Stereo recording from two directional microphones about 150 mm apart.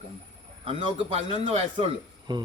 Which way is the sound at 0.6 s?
35° right (ahead or behind).